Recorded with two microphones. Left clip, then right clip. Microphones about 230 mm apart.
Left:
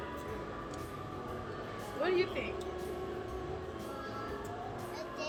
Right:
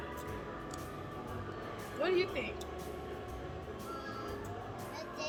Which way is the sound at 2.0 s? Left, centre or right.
Centre.